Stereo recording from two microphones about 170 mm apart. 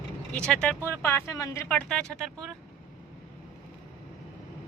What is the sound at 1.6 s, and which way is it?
Speech, 5° left (ahead or behind).